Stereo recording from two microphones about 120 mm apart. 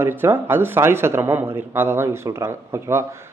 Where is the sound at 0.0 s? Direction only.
15° right (ahead or behind).